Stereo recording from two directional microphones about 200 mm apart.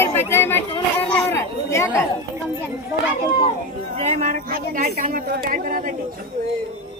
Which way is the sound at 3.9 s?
35° right (ahead or behind).